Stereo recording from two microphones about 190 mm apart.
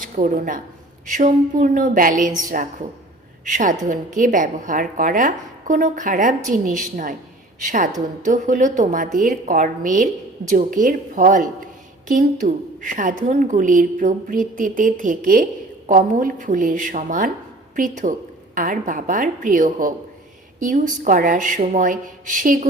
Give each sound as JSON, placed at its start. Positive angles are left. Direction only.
{"t": 0.0, "sound": "a woman's voice", "side_deg": -45}